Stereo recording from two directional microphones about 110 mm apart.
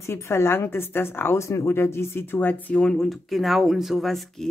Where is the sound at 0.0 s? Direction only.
25° left (ahead or behind).